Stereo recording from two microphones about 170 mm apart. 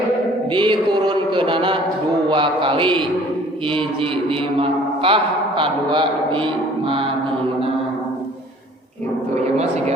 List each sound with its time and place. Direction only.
0.5 s music: 30° right (ahead or behind)
2.3 s a man's voice: 30° right (ahead or behind)